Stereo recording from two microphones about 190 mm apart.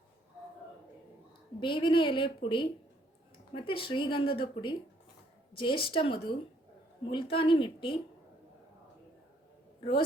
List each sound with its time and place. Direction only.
1.6 s a woman's voice: 25° left (ahead or behind)